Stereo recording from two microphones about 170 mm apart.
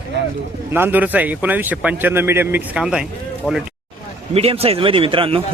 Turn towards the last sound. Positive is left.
turn(degrees=-30)  # may be behind; listen again after turning